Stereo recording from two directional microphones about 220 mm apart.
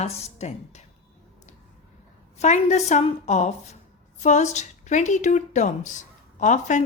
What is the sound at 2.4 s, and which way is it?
A woman's voice, 30° left (ahead or behind).